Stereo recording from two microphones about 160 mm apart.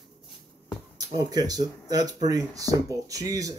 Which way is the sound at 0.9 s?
25° right (ahead or behind).